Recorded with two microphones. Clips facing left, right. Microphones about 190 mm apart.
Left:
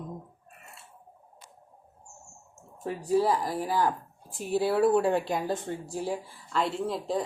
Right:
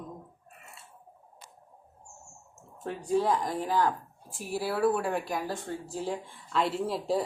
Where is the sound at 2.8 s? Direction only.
5° left (ahead or behind).